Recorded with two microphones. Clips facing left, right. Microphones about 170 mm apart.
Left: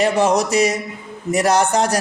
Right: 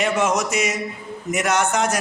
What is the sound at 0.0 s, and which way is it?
A man's voice, 35° left (ahead or behind).